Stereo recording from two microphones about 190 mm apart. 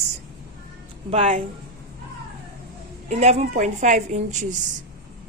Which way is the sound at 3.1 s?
35° right (ahead or behind).